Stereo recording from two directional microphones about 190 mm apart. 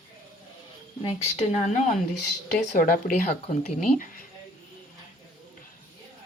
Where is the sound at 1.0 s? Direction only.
35° left (ahead or behind).